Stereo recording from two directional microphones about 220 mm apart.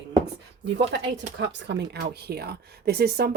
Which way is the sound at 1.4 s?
55° right (ahead or behind).